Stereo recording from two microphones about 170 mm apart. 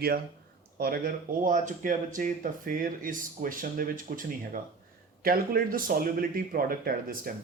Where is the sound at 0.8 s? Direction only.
60° right (ahead or behind).